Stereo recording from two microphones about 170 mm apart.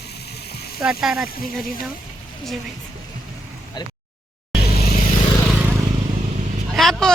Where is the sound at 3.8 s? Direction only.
25° left (ahead or behind).